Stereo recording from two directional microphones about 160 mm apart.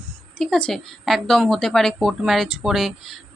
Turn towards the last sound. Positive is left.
turn(degrees=0)  # may be behind; listen again after turning